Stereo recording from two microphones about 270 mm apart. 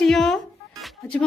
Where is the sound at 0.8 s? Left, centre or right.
Centre.